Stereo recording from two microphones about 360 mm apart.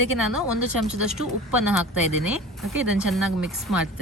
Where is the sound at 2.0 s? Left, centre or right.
Right.